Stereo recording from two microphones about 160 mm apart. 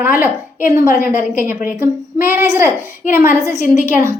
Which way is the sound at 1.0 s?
55° left (ahead or behind).